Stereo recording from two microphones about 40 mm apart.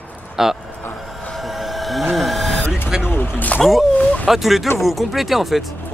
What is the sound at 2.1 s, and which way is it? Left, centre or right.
Vehicle, centre.